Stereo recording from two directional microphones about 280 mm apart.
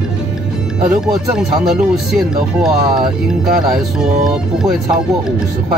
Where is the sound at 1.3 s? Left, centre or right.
Centre.